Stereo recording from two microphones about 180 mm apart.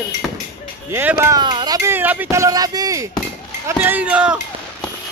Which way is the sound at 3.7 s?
10° right (ahead or behind).